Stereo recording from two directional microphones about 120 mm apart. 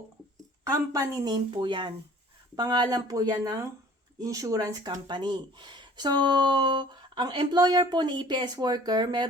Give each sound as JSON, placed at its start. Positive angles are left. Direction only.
{"t": 0.7, "sound": "speech", "side_deg": -30}